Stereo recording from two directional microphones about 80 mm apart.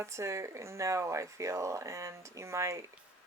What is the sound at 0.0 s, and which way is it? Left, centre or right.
Speech, right.